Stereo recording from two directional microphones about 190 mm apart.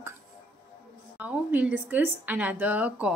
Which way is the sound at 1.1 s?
10° right (ahead or behind).